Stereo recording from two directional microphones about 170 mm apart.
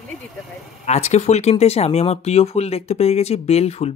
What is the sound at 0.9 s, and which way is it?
Speech, 40° left (ahead or behind).